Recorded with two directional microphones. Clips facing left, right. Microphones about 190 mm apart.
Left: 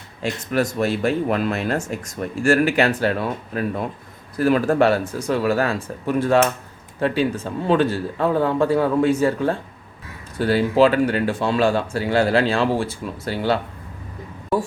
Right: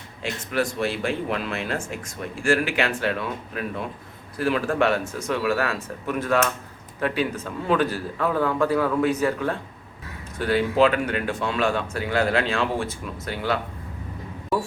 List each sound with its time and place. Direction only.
0.2 s a man's voice: 40° left (ahead or behind)